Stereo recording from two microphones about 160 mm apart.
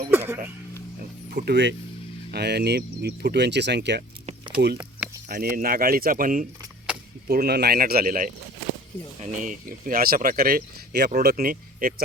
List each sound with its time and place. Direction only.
0.0 s speech: 15° right (ahead or behind)
1.3 s speech: 90° right
5.5 s speech: 65° right (ahead or behind)
7.3 s speech: 80° right; by 12.0 s 60° right (ahead or behind)